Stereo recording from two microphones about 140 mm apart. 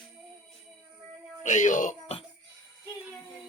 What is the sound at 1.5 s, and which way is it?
Speech, 65° left (ahead or behind).